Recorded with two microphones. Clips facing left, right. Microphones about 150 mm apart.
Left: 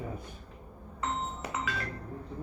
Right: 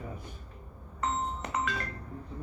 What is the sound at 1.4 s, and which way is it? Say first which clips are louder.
Music: right 2 dB; 5° left (ahead or behind).